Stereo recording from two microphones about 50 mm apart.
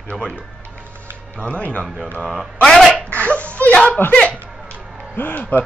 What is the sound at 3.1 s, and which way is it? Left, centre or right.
Speech, left.